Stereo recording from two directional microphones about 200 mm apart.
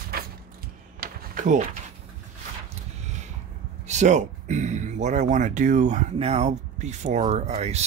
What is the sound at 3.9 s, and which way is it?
Speech, 35° right (ahead or behind).